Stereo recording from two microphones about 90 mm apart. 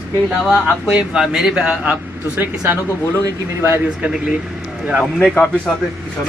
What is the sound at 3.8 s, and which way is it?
Speech, 10° right (ahead or behind).